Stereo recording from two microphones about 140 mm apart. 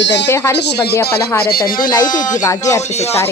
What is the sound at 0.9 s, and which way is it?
Speech, 20° left (ahead or behind).